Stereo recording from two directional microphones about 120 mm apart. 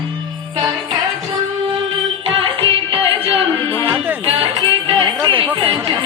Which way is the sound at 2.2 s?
50° right (ahead or behind).